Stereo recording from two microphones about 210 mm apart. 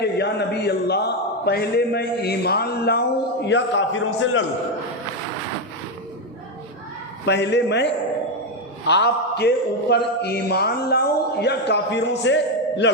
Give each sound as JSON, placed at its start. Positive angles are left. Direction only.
{"t": 0.0, "sound": "a man's voice", "side_deg": 50}
{"t": 3.4, "sound": "a man's voice", "side_deg": 60}
{"t": 7.3, "sound": "a man's voice", "side_deg": 55}